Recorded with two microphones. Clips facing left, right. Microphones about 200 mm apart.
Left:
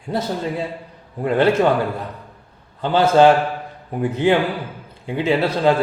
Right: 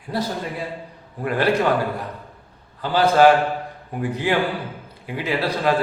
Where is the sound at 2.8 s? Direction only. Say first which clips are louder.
Left 3 dB; 25° left (ahead or behind).